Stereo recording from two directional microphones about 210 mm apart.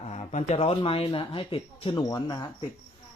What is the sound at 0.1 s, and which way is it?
Speech, 30° left (ahead or behind).